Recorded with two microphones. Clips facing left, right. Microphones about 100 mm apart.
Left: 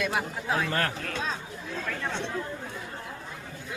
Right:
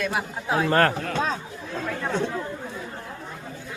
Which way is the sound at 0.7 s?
50° right (ahead or behind).